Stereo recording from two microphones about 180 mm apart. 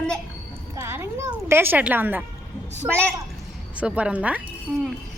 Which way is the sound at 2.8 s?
20° right (ahead or behind).